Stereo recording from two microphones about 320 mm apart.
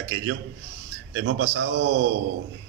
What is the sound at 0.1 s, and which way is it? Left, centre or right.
A man's voice, right.